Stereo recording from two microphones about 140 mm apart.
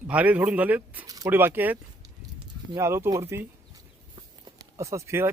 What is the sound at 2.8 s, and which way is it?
Speech, 20° right (ahead or behind).